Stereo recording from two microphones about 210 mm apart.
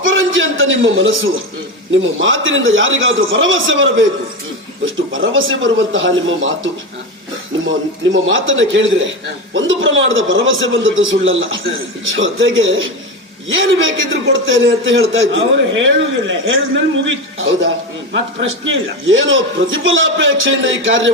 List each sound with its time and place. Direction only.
0.0 s a sound: 70° right (ahead or behind)
2.2 s a man's voice: 70° right (ahead or behind)
5.1 s a man's voice: 65° right (ahead or behind)
7.7 s a man's voice: 65° right (ahead or behind)